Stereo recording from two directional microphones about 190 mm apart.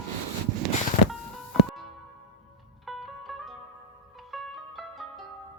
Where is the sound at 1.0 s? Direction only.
40° left (ahead or behind).